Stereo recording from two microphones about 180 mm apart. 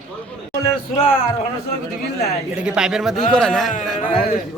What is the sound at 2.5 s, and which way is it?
Speech, 5° right (ahead or behind).